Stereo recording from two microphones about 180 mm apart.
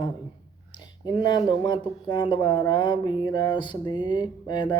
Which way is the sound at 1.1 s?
25° left (ahead or behind).